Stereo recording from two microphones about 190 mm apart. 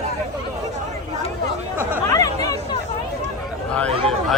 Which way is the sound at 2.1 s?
20° left (ahead or behind).